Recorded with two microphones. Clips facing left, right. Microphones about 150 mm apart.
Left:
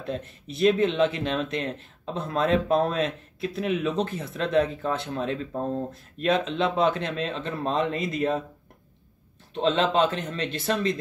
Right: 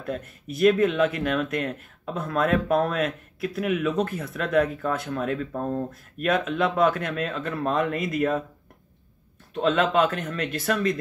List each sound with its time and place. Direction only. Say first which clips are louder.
0.0 s speech: right 1 dB; 25° left (ahead or behind)
9.5 s speech: right 1 dB; 25° left (ahead or behind)